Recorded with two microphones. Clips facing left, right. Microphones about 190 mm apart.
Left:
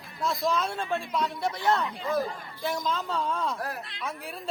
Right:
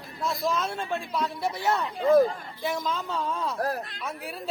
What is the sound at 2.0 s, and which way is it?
Speech, 55° right (ahead or behind).